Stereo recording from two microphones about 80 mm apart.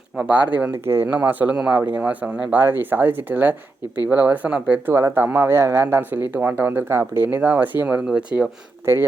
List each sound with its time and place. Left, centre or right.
0.3 s speech: right
2.6 s speech: right
4.9 s speech: right; by 8.4 s centre
8.9 s speech: right